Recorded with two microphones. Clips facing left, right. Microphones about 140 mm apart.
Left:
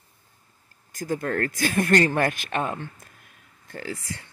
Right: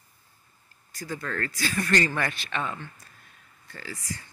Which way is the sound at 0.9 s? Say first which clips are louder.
Left 7 dB; 50° left (ahead or behind).